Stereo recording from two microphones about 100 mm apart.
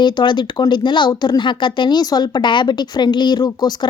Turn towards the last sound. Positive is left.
turn(degrees=40)  # may be behind; listen again after turning